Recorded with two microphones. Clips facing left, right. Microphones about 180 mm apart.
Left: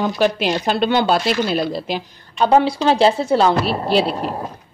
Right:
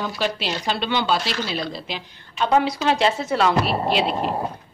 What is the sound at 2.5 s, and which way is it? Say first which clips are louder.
A woman's voice: left 4 dB; 30° left (ahead or behind).